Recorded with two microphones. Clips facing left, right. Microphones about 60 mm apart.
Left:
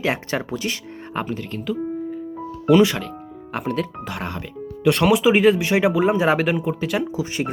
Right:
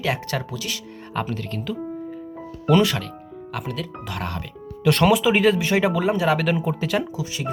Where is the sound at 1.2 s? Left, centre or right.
Centre.